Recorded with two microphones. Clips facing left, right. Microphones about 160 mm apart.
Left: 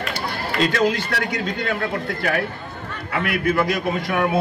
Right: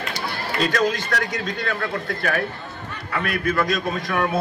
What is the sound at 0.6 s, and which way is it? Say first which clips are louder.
A man's voice: left 2 dB; 30° left (ahead or behind).